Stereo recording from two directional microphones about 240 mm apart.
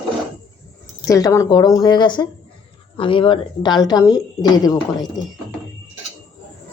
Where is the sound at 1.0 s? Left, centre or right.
Centre.